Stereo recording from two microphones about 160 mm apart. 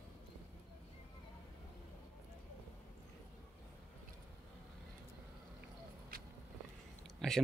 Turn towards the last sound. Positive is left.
turn(degrees=0)  # may be behind; listen again after turning